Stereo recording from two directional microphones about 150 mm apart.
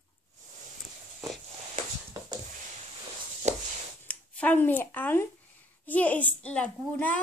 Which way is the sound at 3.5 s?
50° right (ahead or behind).